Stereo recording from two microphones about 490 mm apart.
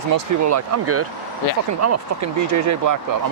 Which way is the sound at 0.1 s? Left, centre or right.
Right.